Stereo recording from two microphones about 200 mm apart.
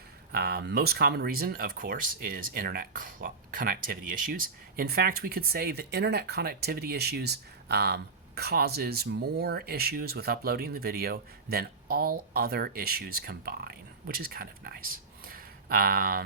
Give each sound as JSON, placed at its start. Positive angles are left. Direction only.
{"t": 0.3, "sound": "speech", "side_deg": -50}